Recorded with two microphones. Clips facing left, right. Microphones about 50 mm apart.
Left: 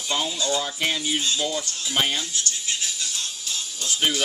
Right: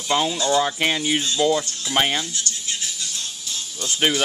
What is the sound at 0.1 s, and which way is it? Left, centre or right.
Speech, right.